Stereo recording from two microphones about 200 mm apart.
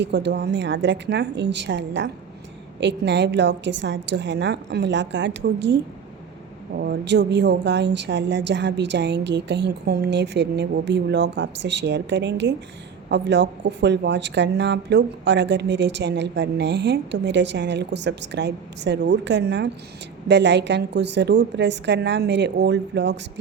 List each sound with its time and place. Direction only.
0.0 s speech: 60° right (ahead or behind)